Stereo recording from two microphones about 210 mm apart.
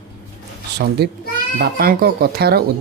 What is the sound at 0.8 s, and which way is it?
Speech, 50° right (ahead or behind).